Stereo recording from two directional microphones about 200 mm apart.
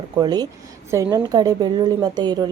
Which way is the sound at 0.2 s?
20° right (ahead or behind).